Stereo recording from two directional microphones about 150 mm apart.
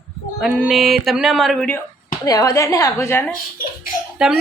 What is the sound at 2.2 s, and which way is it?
A woman's voice, 25° left (ahead or behind).